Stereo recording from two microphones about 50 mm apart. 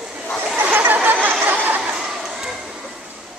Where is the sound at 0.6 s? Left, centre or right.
Right.